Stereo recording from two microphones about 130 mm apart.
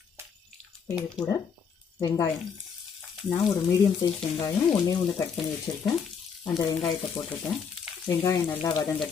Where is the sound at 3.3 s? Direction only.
35° left (ahead or behind).